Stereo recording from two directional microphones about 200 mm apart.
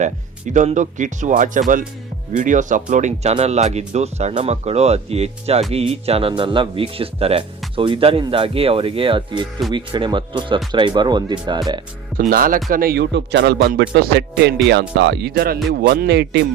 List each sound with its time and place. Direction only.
0.0 s speech: 35° right (ahead or behind); by 11.8 s 20° right (ahead or behind)
12.1 s speech: 45° right (ahead or behind)